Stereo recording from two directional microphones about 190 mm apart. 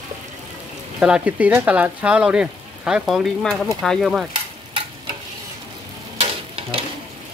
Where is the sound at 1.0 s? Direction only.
5° right (ahead or behind).